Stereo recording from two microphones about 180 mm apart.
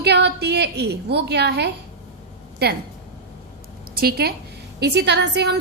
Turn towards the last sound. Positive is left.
turn(degrees=-70)  # may be behind; listen again after turning